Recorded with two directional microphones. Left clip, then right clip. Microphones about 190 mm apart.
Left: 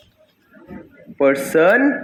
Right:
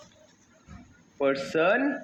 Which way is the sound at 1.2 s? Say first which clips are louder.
Left 10 dB; 35° left (ahead or behind).